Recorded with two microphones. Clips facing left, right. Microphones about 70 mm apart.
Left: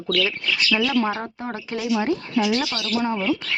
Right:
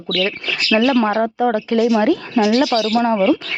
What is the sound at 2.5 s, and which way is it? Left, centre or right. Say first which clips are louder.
Speech: right 10 dB; right.